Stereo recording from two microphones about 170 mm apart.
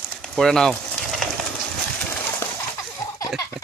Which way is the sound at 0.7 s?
Centre (ahead or behind).